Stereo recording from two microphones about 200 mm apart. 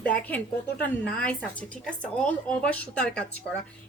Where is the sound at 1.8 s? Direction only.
5° left (ahead or behind).